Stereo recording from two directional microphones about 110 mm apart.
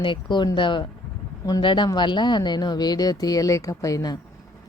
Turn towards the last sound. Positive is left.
turn(degrees=35)  # may be behind; listen again after turning